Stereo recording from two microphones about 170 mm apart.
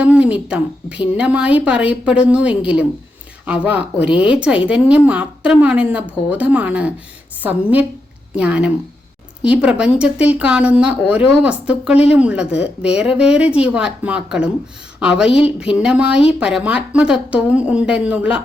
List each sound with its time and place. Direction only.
0.0 s a woman's voice: 5° right (ahead or behind)
4.1 s a woman's voice: 30° left (ahead or behind)
4.4 s a woman's voice: 5° right (ahead or behind)